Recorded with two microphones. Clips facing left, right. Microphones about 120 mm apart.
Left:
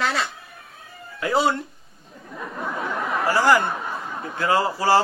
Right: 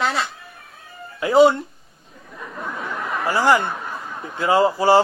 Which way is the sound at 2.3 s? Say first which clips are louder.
Left 2 dB; centre (ahead or behind).